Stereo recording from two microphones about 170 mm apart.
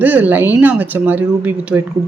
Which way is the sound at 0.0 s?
10° right (ahead or behind).